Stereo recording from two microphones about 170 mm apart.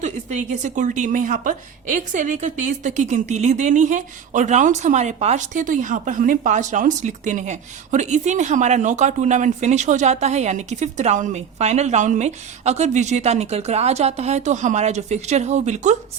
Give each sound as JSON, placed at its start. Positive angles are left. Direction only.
{"t": 0.0, "sound": "a woman's voice", "side_deg": -45}